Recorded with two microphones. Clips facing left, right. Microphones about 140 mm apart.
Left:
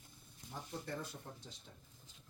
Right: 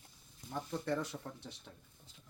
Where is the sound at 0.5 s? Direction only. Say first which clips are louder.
Right 8 dB; 70° right (ahead or behind).